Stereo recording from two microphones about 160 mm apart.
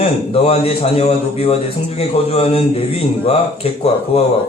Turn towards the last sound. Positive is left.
turn(degrees=40)  # may be behind; listen again after turning